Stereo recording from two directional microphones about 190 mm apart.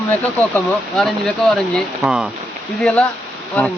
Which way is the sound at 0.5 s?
Centre (ahead or behind).